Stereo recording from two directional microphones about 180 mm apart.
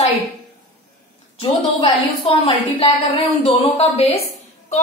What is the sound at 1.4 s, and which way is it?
A woman's voice, 30° left (ahead or behind).